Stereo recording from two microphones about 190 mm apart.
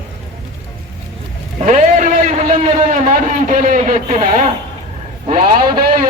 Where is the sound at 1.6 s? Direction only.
40° right (ahead or behind).